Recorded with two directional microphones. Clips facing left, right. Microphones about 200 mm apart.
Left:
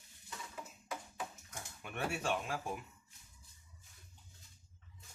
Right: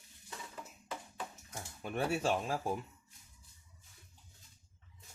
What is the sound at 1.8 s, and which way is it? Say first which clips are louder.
Speech: right 5 dB; 35° right (ahead or behind).